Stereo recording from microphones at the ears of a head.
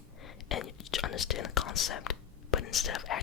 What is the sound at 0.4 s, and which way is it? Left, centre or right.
Speech, left.